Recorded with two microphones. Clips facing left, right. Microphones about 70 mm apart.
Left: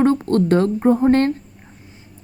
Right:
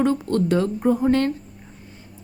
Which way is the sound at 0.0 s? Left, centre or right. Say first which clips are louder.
Left 4 dB; left.